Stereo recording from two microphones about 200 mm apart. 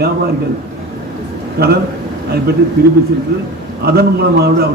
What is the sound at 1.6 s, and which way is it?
Speech, 55° right (ahead or behind).